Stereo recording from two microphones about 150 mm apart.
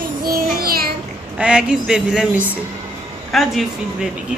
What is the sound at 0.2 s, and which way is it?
Child singing, 80° right.